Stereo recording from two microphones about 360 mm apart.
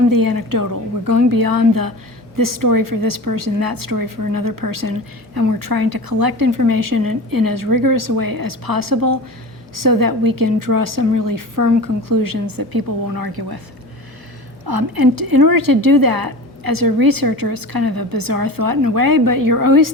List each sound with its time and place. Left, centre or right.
0.1 s a woman's voice: right
14.6 s a woman's voice: right